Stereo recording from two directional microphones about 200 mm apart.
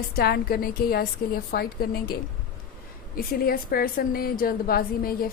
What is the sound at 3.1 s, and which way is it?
A woman's voice, 50° left (ahead or behind).